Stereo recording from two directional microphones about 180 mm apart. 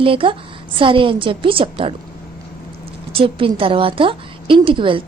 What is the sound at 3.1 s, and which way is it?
A woman's voice, 30° right (ahead or behind).